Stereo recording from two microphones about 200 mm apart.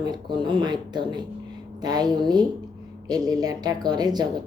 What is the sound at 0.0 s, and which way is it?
A woman's voice, 20° right (ahead or behind).